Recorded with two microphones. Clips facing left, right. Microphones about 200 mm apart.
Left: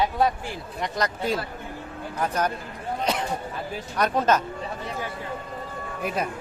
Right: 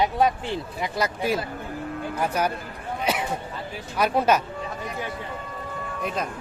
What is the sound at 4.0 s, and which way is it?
Speech, 10° right (ahead or behind).